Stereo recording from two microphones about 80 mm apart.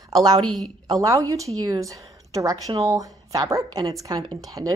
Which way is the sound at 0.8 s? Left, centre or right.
Right.